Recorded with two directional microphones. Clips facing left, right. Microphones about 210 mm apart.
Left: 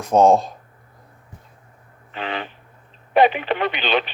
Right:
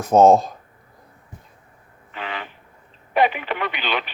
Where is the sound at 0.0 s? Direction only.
5° right (ahead or behind).